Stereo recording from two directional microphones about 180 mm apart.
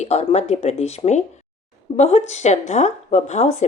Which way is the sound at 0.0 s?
35° left (ahead or behind).